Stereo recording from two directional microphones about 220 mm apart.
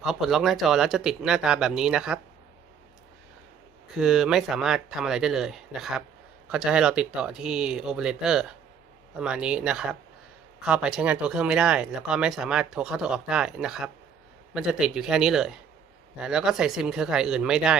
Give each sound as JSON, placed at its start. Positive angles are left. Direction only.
{"t": 0.0, "sound": "speech", "side_deg": 0}
{"t": 3.9, "sound": "speech", "side_deg": -5}